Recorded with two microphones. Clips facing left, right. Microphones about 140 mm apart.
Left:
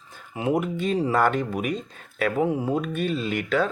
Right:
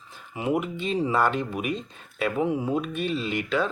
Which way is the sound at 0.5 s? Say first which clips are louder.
Left 3 dB; 50° left (ahead or behind).